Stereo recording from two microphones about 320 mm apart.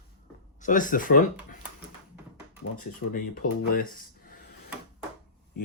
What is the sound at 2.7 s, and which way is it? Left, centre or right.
Speech, left.